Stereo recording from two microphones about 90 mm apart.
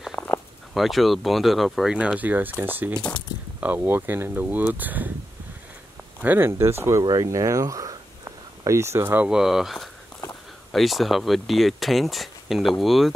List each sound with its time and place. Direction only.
0.2 s a sound: centre (ahead or behind)
0.7 s speech: centre (ahead or behind)
2.0 s speech: 15° right (ahead or behind)
6.2 s speech: 25° right (ahead or behind)
7.2 s a sound: 35° right (ahead or behind)
9.3 s speech: 5° right (ahead or behind)